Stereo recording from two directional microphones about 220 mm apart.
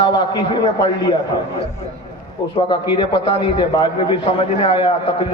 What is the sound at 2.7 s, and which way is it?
A man's voice, 20° left (ahead or behind).